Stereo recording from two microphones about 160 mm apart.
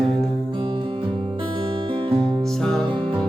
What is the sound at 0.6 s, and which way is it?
Music, 30° right (ahead or behind).